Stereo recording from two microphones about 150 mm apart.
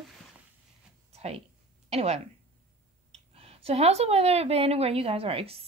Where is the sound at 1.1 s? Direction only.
45° right (ahead or behind).